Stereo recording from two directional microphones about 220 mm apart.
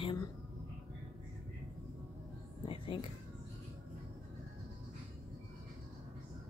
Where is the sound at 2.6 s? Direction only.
25° left (ahead or behind).